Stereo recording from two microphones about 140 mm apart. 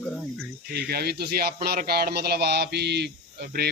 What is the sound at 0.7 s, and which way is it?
Speech, 90° right.